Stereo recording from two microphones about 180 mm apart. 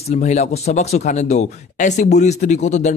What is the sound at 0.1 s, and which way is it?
Speech, 40° left (ahead or behind).